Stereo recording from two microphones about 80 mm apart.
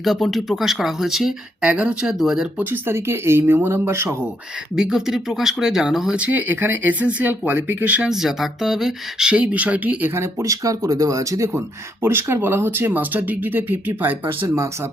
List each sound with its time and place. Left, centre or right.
0.0 s speech: centre
1.6 s speech: centre
2.6 s speech: right
4.8 s speech: centre
6.1 s speech: centre
8.1 s speech: centre
10.2 s speech: right